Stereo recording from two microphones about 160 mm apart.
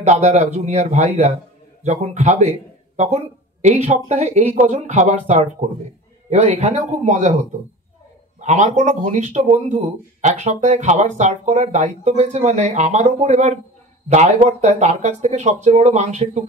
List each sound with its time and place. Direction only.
0.0 s speech: 45° right (ahead or behind)